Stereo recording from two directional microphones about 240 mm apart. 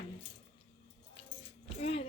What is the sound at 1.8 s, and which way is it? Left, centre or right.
Music, left.